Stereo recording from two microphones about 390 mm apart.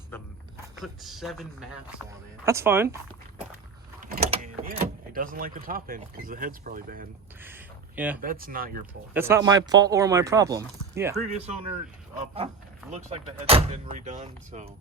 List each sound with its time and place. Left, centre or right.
0.1 s a sound: centre
0.8 s speech: centre
4.0 s speech: right
7.4 s a sound: centre
8.2 s speech: right
9.1 s speech: centre